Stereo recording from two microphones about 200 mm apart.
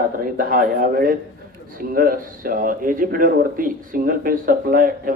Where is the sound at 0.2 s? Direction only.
45° right (ahead or behind).